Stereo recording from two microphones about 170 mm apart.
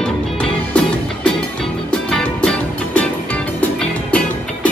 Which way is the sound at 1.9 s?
5° left (ahead or behind).